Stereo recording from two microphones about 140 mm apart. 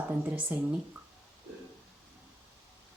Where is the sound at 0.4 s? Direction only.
15° right (ahead or behind).